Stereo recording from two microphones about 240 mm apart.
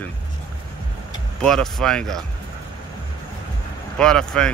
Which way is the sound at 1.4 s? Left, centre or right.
Centre.